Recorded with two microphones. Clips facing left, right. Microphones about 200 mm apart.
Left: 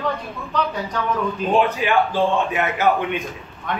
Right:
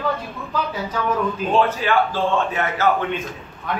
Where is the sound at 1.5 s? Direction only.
15° left (ahead or behind).